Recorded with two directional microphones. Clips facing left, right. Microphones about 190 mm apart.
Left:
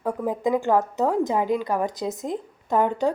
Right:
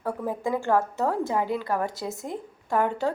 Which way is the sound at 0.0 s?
15° left (ahead or behind).